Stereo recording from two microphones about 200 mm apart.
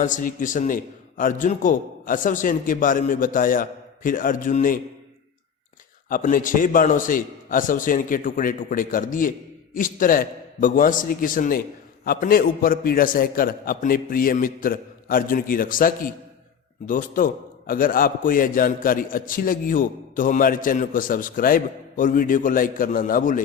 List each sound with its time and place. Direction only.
0.0 s a man's voice: 40° left (ahead or behind)
6.1 s a man's voice: 45° left (ahead or behind)